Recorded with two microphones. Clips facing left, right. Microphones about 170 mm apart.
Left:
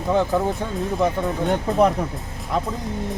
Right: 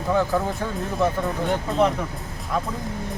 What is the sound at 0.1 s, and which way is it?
Speech, 20° left (ahead or behind).